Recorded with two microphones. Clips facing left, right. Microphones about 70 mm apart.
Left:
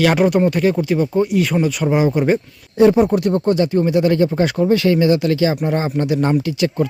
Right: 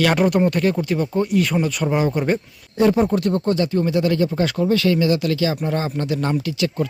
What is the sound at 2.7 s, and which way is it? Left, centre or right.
Speech, left.